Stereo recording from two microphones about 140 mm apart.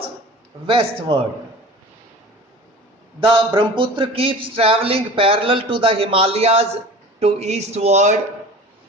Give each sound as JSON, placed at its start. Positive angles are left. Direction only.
{"t": 0.7, "sound": "a man's voice", "side_deg": -40}
{"t": 3.2, "sound": "a man's voice", "side_deg": -35}